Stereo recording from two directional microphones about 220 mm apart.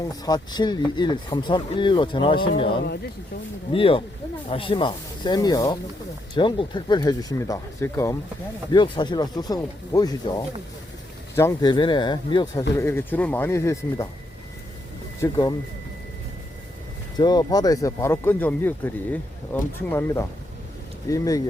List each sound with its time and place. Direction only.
0.0 s speech: 20° left (ahead or behind)
3.7 s speech: 25° left (ahead or behind)
12.8 s speech: 10° left (ahead or behind)
15.2 s speech: 15° left (ahead or behind)
17.2 s speech: 20° left (ahead or behind)